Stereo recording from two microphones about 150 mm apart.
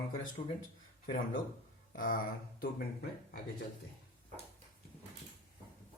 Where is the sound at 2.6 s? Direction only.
90° left.